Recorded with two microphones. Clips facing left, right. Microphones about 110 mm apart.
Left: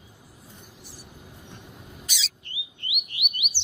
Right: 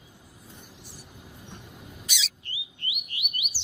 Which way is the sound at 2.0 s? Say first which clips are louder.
Right 2 dB; 35° left (ahead or behind).